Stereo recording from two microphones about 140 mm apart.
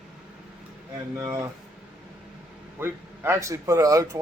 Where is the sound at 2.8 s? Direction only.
15° right (ahead or behind).